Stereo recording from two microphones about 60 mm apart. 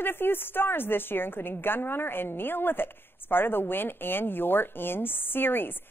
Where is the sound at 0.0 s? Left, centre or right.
Left.